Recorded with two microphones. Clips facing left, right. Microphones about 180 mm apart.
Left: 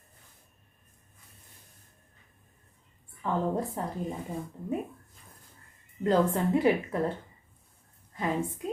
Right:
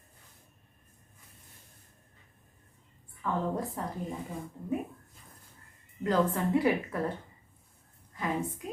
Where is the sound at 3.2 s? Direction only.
25° left (ahead or behind).